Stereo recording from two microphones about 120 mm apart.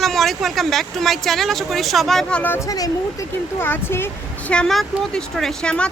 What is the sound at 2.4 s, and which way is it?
Speech, 15° left (ahead or behind).